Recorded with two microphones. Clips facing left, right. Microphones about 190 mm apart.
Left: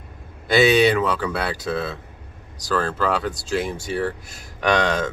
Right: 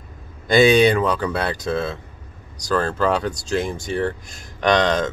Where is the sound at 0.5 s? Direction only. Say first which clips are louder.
Right 2 dB; 5° left (ahead or behind).